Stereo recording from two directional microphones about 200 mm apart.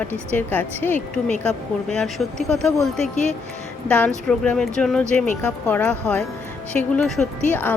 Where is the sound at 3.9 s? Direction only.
5° left (ahead or behind).